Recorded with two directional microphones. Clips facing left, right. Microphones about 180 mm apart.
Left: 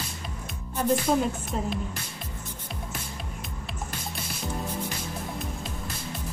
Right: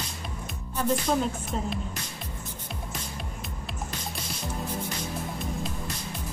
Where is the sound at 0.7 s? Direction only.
5° left (ahead or behind).